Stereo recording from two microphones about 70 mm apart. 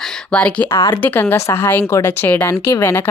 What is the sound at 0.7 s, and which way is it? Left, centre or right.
Speech, left.